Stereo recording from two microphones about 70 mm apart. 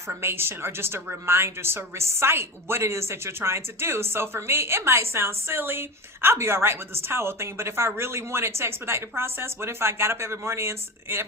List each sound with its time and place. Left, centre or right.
0.1 s a woman's voice: right